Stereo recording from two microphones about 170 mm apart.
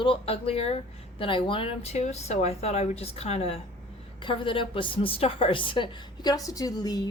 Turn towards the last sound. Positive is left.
turn(degrees=25)  # may be behind; listen again after turning